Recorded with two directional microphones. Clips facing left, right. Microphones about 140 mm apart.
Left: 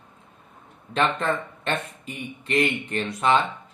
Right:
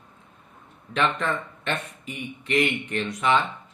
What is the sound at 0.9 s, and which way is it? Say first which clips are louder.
Speech: left 2 dB; 35° left (ahead or behind).